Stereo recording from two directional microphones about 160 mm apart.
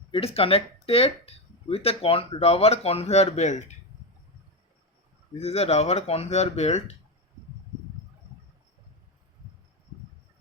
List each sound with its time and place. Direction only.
0.1 s speech: 35° left (ahead or behind)
5.4 s speech: 40° left (ahead or behind)